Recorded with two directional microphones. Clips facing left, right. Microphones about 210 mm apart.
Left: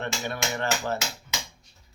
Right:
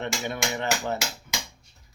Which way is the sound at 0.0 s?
15° right (ahead or behind).